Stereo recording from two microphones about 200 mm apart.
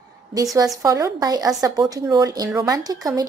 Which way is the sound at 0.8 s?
15° right (ahead or behind).